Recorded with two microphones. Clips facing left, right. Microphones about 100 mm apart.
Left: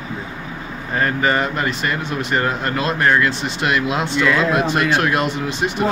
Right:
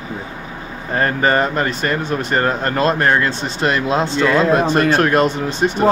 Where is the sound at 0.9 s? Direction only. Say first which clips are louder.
Right 2 dB; 40° right (ahead or behind).